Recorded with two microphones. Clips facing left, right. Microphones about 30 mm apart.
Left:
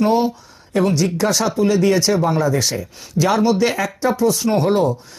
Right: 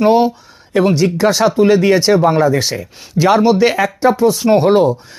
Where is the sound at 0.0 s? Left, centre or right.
Right.